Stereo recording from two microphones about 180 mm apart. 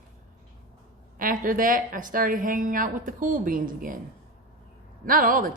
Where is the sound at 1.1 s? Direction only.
50° right (ahead or behind).